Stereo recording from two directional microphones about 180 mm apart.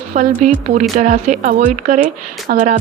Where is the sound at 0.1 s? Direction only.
45° right (ahead or behind).